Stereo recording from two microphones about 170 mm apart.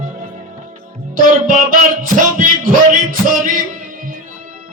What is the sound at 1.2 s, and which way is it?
Music, 55° right (ahead or behind).